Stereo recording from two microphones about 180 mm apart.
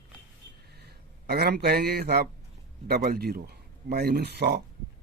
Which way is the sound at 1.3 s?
60° right (ahead or behind).